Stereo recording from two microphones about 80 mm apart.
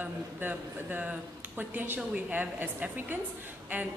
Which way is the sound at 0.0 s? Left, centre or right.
Right.